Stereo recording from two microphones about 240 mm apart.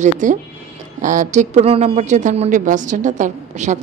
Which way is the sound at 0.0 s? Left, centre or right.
Right.